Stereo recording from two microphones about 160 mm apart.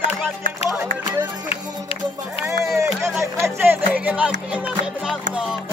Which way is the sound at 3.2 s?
15° right (ahead or behind).